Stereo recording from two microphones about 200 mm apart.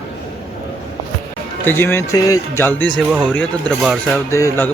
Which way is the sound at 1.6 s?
10° left (ahead or behind).